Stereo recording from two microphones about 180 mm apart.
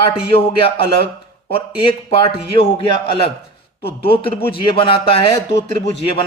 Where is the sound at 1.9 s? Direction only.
30° left (ahead or behind).